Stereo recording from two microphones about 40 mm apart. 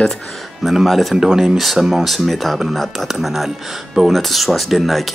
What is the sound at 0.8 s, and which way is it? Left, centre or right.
Speech, centre.